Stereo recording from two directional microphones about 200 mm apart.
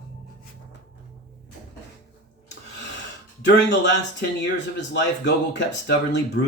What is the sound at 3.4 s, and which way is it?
Speech, 65° left (ahead or behind).